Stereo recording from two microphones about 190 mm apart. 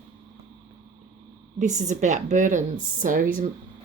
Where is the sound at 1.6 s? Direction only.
40° right (ahead or behind).